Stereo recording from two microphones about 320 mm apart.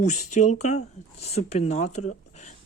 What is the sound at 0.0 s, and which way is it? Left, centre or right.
Speech, left.